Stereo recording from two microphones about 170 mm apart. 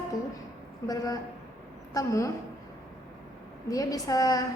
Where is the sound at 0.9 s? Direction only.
20° left (ahead or behind).